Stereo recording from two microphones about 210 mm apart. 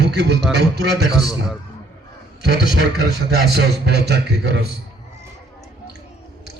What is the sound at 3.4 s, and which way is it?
A man's voice, 50° right (ahead or behind).